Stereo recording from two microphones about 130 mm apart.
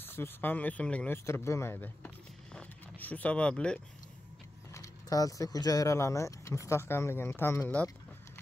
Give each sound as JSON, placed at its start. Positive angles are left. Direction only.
{"t": 0.0, "sound": "speech", "side_deg": 15}
{"t": 4.7, "sound": "speech", "side_deg": 25}